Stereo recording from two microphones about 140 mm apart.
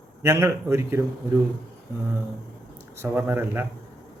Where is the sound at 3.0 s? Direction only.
15° right (ahead or behind).